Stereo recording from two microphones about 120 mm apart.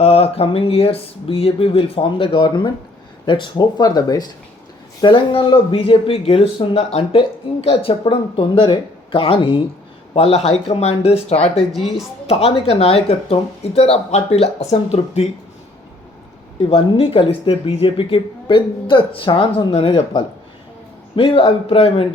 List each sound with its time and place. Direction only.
0.0 s speech: 55° left (ahead or behind); by 4.3 s 35° left (ahead or behind)
4.9 s speech: 45° left (ahead or behind)
10.2 s speech: 60° left (ahead or behind)
11.7 s speech: centre (ahead or behind)
12.3 s speech: 55° left (ahead or behind)
16.6 s speech: 55° left (ahead or behind)